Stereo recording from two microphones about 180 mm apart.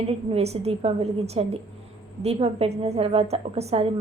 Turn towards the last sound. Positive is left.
turn(degrees=-35)  # may be behind; listen again after turning